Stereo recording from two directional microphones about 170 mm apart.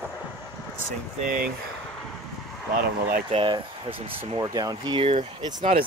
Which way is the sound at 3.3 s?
30° right (ahead or behind).